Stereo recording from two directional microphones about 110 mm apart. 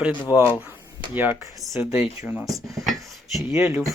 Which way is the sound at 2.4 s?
Centre (ahead or behind).